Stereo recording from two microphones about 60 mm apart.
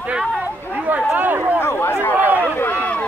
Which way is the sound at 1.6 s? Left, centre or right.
Left.